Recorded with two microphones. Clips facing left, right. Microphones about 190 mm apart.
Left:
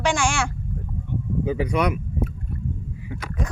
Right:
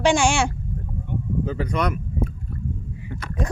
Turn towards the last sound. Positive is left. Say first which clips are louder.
# even
turn(degrees=5)  # may be behind; listen again after turning